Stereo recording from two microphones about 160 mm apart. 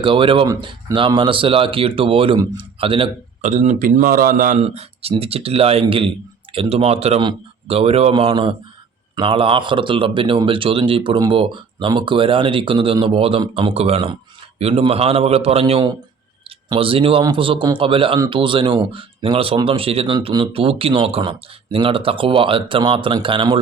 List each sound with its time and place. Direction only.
0.0 s a man's voice: 30° right (ahead or behind)
3.5 s speech: 45° right (ahead or behind)
4.6 s a man's voice: 40° right (ahead or behind)